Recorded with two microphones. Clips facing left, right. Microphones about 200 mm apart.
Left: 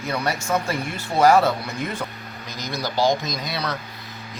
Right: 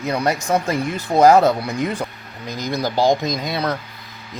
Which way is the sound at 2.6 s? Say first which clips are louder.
Right 4 dB; 50° right (ahead or behind).